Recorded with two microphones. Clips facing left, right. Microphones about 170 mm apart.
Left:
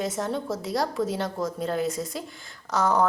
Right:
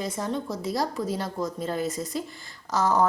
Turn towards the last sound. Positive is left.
turn(degrees=0)  # may be behind; listen again after turning